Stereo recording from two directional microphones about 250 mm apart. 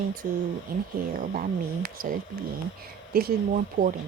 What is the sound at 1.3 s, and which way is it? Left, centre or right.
Speech, right.